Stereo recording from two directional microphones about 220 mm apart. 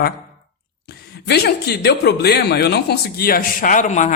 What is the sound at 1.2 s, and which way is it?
A woman's voice, 50° left (ahead or behind).